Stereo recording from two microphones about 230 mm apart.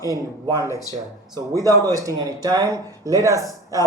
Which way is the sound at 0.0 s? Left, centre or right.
Centre.